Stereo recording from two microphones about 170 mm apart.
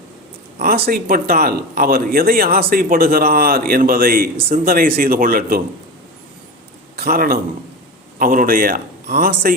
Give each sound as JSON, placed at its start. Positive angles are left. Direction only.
{"t": 0.6, "sound": "speech", "side_deg": -60}
{"t": 6.9, "sound": "a man's voice", "side_deg": -65}